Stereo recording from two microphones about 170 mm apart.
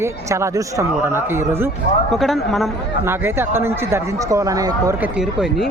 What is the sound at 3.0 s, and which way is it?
Speech, 15° right (ahead or behind).